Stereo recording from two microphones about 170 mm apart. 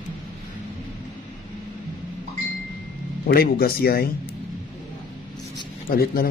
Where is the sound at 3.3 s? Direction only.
60° left (ahead or behind).